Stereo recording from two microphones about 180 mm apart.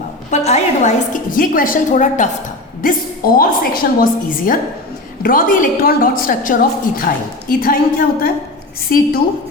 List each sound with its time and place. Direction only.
0.3 s a woman's voice: 40° left (ahead or behind)